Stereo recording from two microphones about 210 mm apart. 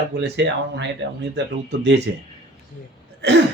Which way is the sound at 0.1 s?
55° right (ahead or behind).